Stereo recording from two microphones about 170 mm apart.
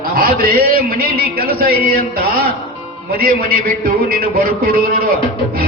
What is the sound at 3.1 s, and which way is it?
A man's voice, 60° right (ahead or behind).